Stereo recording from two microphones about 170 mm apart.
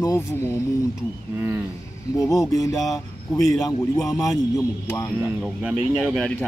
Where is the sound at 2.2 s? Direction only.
20° left (ahead or behind).